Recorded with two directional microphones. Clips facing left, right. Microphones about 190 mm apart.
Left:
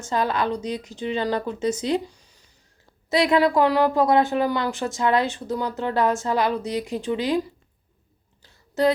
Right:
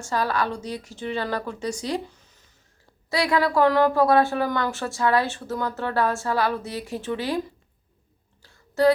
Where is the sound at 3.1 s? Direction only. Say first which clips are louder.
Left 4 dB; 20° left (ahead or behind).